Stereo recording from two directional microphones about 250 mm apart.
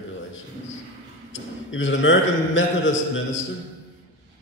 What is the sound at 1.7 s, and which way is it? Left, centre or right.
Speech, left.